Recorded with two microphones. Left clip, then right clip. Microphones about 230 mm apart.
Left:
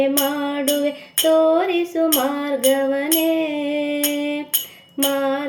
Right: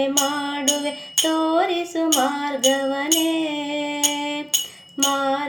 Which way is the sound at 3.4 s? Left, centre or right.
Right.